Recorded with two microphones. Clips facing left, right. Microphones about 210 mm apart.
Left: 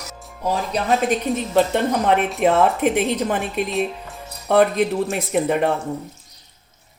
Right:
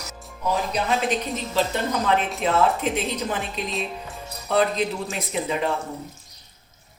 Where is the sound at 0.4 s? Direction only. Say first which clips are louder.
Left 2 dB; 45° left (ahead or behind).